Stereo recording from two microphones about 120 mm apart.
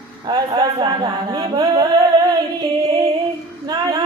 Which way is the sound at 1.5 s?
30° right (ahead or behind).